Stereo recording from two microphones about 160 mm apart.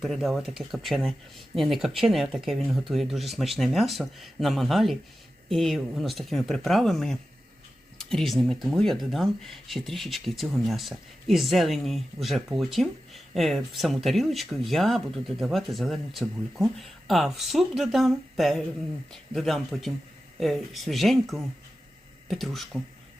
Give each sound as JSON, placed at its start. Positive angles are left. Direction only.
{"t": 0.0, "sound": "speech", "side_deg": 0}